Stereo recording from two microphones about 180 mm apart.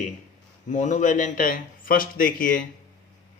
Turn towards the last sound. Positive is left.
turn(degrees=50)  # may be behind; listen again after turning